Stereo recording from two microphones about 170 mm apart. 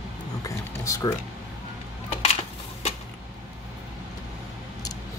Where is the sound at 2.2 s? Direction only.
40° left (ahead or behind).